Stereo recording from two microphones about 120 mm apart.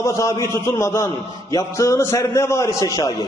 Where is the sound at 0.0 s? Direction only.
30° left (ahead or behind).